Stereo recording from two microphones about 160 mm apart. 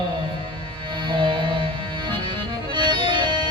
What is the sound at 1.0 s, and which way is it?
Music, 30° right (ahead or behind).